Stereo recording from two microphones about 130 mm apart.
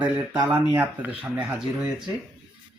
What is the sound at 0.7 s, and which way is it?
Speech, 15° right (ahead or behind).